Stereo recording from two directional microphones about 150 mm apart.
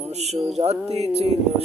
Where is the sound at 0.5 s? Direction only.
45° right (ahead or behind).